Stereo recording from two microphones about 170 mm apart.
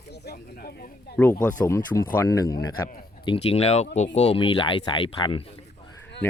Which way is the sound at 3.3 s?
35° left (ahead or behind).